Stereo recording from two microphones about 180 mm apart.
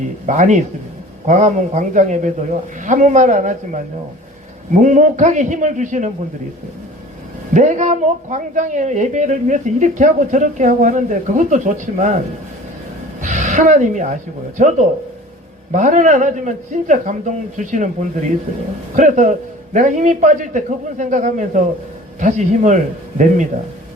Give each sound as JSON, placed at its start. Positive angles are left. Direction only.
{"t": 0.3, "sound": "a man's voice", "side_deg": -45}
{"t": 7.5, "sound": "a man's voice", "side_deg": -45}
{"t": 13.2, "sound": "a woman's voice", "side_deg": -45}
{"t": 15.7, "sound": "a man's voice", "side_deg": -45}